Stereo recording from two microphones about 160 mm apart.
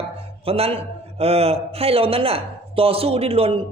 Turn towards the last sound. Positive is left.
turn(degrees=-35)  # may be behind; listen again after turning